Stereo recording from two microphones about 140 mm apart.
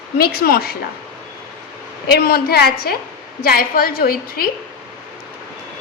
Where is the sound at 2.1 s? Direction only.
90° left.